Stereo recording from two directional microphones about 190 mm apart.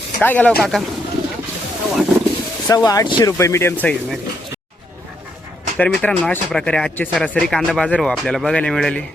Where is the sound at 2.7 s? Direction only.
20° left (ahead or behind).